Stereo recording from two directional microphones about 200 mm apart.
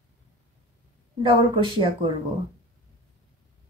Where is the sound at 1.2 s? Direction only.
25° right (ahead or behind).